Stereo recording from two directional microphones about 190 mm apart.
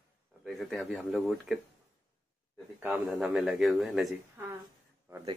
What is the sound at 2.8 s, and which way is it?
Speech, 5° right (ahead or behind).